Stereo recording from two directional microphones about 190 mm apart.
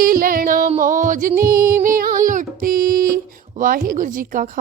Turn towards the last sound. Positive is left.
turn(degrees=-45)  # may be behind; listen again after turning